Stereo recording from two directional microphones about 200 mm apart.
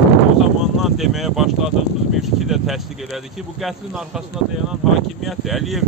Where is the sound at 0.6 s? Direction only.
Centre (ahead or behind).